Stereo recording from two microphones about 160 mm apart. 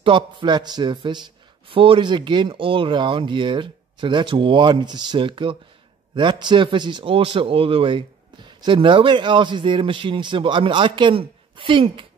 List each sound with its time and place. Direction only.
0.0 s a man's voice: 30° right (ahead or behind)